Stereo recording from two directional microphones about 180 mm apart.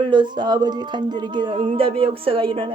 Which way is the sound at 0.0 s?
25° right (ahead or behind).